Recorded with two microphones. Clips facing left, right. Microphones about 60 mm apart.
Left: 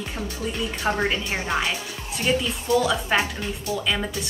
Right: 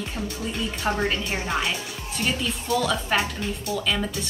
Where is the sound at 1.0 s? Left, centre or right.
Left.